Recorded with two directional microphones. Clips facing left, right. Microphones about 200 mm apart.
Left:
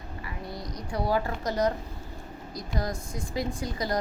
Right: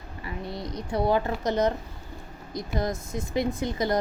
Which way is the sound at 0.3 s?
25° right (ahead or behind).